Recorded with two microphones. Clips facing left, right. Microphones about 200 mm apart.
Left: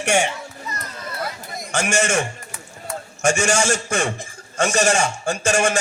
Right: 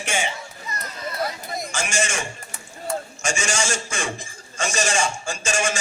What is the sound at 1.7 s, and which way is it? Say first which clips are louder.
A man's voice: left 7 dB; 60° left (ahead or behind).